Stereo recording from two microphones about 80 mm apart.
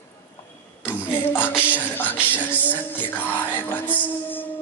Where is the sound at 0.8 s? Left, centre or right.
Left.